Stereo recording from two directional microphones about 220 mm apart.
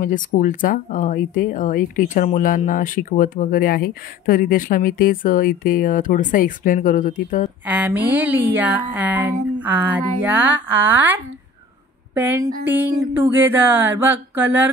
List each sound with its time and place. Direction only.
0.0 s speech: 35° left (ahead or behind)
7.6 s speech: 5° right (ahead or behind)